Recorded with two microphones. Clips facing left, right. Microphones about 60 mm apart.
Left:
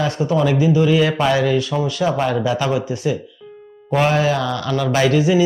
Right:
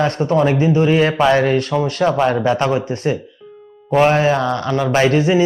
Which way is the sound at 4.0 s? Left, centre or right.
Right.